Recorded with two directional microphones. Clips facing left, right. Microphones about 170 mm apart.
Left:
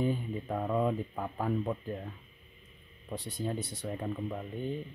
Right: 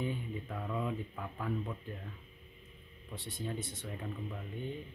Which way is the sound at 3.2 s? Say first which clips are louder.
Left 4 dB; 40° left (ahead or behind).